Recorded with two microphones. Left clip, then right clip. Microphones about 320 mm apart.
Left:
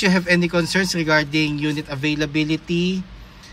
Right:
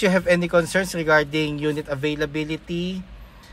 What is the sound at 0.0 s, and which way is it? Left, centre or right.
Speech, centre.